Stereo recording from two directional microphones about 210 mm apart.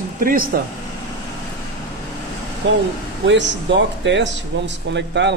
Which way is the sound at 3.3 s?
60° right (ahead or behind).